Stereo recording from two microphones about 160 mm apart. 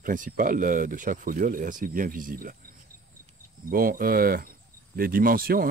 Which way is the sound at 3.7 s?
65° right (ahead or behind).